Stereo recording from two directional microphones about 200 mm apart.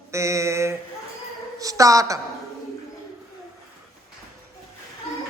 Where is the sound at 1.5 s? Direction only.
15° right (ahead or behind).